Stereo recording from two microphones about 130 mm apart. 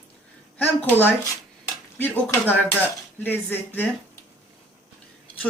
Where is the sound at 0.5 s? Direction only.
15° left (ahead or behind).